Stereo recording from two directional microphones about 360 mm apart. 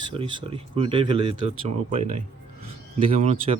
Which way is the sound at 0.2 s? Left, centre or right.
Centre.